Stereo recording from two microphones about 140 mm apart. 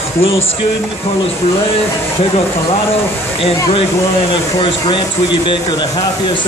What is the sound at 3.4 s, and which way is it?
Speech, 45° left (ahead or behind).